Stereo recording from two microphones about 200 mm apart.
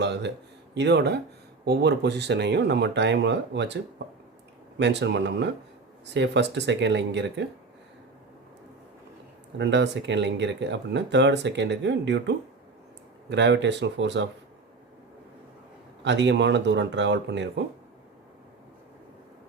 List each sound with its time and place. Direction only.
0.0 s speech: 60° right (ahead or behind)
9.6 s speech: 60° right (ahead or behind)
16.0 s speech: 65° right (ahead or behind)